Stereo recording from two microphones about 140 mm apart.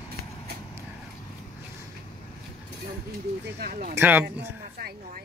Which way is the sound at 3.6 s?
75° right (ahead or behind).